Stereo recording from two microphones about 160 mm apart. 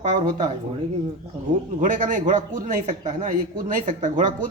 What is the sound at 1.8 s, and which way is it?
Speech, 55° right (ahead or behind).